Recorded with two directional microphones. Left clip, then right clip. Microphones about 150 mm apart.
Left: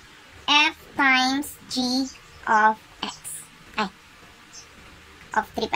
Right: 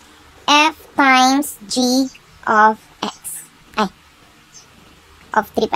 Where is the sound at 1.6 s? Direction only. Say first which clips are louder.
Right 8 dB; 25° right (ahead or behind).